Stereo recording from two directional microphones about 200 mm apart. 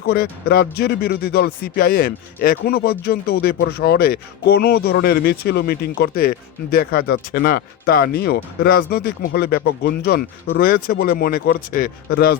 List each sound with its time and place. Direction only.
0.1 s speech: 50° left (ahead or behind)